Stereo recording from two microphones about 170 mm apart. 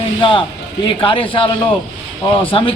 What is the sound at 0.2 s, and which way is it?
A man's voice, 30° left (ahead or behind).